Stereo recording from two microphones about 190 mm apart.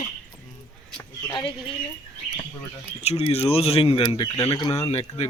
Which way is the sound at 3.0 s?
35° left (ahead or behind).